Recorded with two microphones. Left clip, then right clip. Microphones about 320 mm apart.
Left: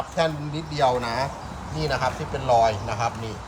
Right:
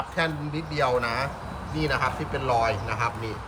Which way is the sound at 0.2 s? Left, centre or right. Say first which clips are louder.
Left 4 dB; centre.